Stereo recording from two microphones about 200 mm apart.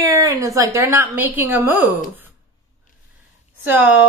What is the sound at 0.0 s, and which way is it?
A woman's voice, 15° right (ahead or behind).